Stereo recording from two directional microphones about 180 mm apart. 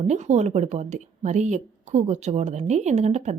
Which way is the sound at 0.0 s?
40° right (ahead or behind).